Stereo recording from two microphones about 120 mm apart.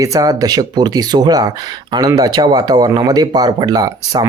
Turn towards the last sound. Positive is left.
turn(degrees=-35)  # may be behind; listen again after turning